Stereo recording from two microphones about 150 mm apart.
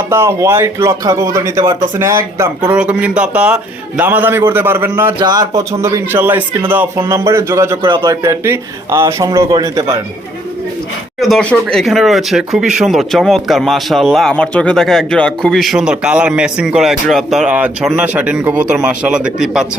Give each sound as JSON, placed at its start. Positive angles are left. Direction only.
{"t": 0.1, "sound": "speech", "side_deg": -20}
{"t": 2.6, "sound": "speech", "side_deg": -5}
{"t": 5.2, "sound": "speech", "side_deg": -25}
{"t": 5.8, "sound": "speech", "side_deg": -15}
{"t": 11.2, "sound": "speech", "side_deg": 5}